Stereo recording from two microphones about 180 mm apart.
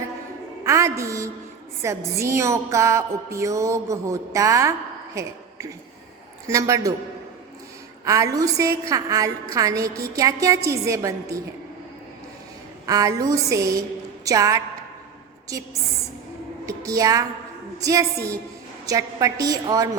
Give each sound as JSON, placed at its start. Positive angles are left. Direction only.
{"t": 0.6, "sound": "a woman's voice", "side_deg": -15}
{"t": 5.1, "sound": "a sound", "side_deg": -15}
{"t": 6.5, "sound": "a woman's voice", "side_deg": -20}
{"t": 8.0, "sound": "a woman's voice", "side_deg": -20}
{"t": 12.8, "sound": "a woman's voice", "side_deg": -20}
{"t": 16.6, "sound": "a woman's voice", "side_deg": -20}